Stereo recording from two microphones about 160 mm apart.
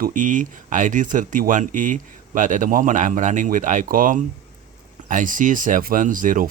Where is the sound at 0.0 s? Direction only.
55° right (ahead or behind).